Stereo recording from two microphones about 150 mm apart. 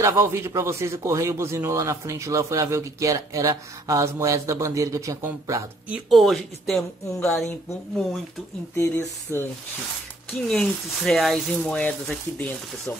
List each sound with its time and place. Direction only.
0.0 s speech: 20° right (ahead or behind)
6.0 s speech: centre (ahead or behind)
8.7 s speech: 15° left (ahead or behind)
10.5 s speech: 5° left (ahead or behind)